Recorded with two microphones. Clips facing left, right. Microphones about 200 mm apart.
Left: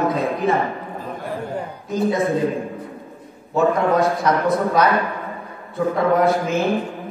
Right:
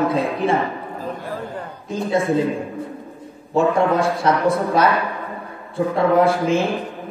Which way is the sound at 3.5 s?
30° right (ahead or behind).